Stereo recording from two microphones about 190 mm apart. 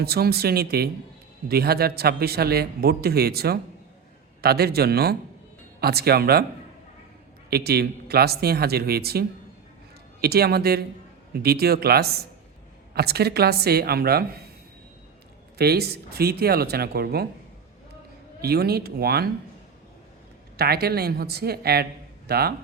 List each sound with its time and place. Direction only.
0.0 s a man's voice: 55° right (ahead or behind)
7.5 s a man's voice: 55° right (ahead or behind)
15.5 s a man's voice: 55° right (ahead or behind)
18.4 s a man's voice: 55° right (ahead or behind)
20.6 s a man's voice: 55° right (ahead or behind)